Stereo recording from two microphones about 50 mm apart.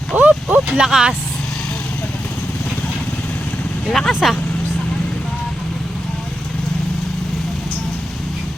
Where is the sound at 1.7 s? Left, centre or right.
Left.